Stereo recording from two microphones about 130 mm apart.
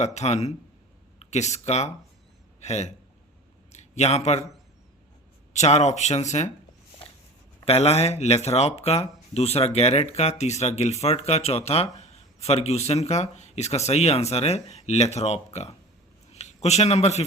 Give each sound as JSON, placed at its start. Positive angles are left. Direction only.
{"t": 0.0, "sound": "a man's voice", "side_deg": 60}
{"t": 3.7, "sound": "a sound", "side_deg": 60}
{"t": 5.5, "sound": "speech", "side_deg": 60}
{"t": 7.6, "sound": "a man's voice", "side_deg": 50}